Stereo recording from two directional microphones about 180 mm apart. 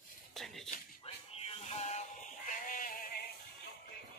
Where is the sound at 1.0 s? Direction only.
30° left (ahead or behind); by 3.3 s 55° left (ahead or behind).